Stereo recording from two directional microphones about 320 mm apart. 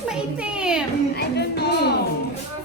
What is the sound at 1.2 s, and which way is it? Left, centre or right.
Speech, left.